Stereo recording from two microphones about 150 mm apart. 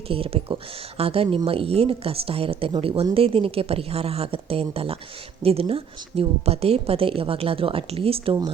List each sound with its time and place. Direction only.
0.1 s speech: 40° right (ahead or behind)